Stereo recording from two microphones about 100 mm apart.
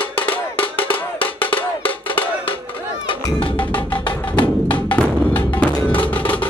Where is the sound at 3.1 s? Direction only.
60° left (ahead or behind).